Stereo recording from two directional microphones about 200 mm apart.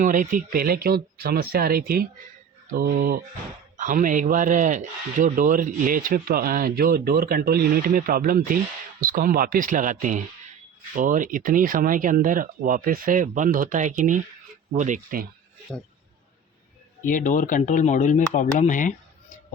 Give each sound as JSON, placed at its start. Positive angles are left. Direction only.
{"t": 0.0, "sound": "a man's voice", "side_deg": -40}
{"t": 17.1, "sound": "speech", "side_deg": 40}